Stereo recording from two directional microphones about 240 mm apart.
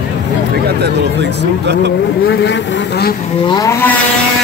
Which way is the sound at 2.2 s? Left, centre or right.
Left.